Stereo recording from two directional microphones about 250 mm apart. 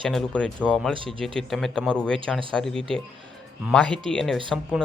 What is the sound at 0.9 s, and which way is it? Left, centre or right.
Speech, right.